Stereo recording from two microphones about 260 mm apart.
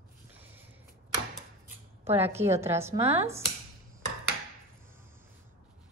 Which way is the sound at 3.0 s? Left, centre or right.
Right.